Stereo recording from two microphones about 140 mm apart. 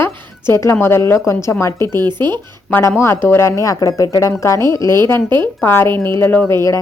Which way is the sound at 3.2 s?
20° left (ahead or behind).